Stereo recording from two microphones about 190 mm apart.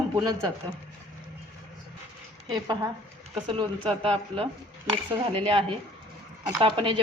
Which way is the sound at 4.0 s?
30° right (ahead or behind).